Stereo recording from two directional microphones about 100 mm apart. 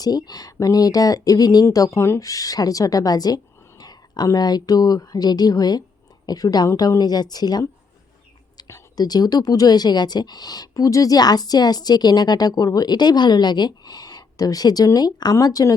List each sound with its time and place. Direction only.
0.0 s speech: 40° left (ahead or behind)
8.6 s speech: 35° left (ahead or behind)